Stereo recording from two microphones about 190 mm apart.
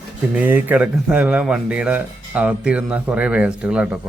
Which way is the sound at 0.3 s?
10° right (ahead or behind).